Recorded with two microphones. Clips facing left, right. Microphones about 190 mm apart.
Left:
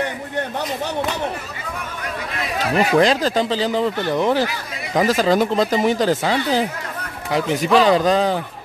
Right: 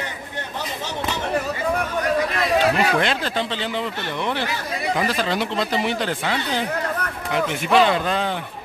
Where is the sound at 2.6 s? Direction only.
35° left (ahead or behind).